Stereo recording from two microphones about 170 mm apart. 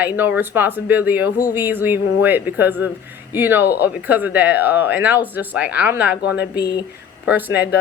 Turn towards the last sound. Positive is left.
turn(degrees=-10)  # may be behind; listen again after turning